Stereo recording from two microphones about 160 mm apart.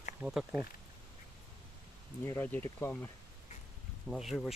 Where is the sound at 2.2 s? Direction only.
15° left (ahead or behind).